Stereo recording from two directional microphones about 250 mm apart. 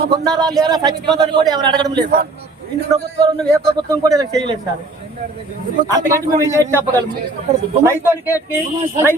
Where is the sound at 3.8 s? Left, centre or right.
Centre.